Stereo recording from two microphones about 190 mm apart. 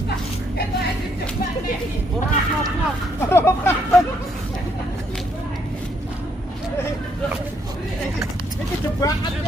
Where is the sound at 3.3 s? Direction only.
15° left (ahead or behind).